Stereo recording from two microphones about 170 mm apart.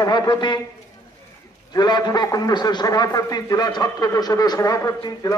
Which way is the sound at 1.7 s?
25° left (ahead or behind).